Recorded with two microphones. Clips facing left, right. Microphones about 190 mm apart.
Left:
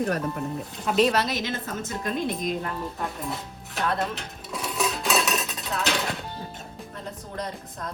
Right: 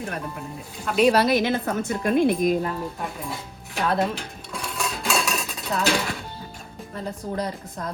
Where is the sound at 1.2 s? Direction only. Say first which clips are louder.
Right 8 dB; 55° right (ahead or behind).